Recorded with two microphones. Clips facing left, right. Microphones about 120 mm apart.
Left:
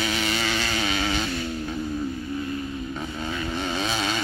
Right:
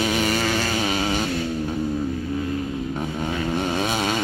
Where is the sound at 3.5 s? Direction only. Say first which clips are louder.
Right 4 dB; 50° right (ahead or behind).